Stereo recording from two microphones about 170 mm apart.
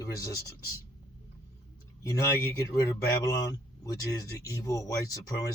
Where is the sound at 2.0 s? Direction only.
20° left (ahead or behind).